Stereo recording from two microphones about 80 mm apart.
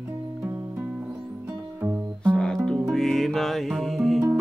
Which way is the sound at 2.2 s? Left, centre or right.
Centre.